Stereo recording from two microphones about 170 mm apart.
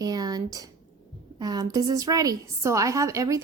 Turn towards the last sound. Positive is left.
turn(degrees=-20)  # may be behind; listen again after turning